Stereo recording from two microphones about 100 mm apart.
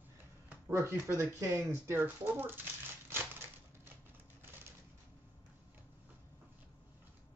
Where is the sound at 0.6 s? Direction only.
25° right (ahead or behind).